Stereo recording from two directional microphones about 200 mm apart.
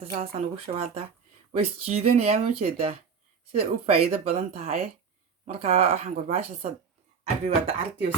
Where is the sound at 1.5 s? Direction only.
30° right (ahead or behind).